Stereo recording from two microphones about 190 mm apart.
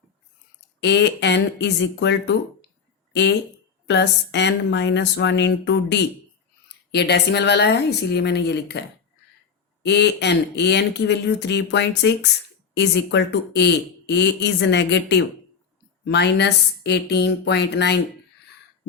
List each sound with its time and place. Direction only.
0.8 s speech: 65° left (ahead or behind)
9.8 s speech: 60° left (ahead or behind)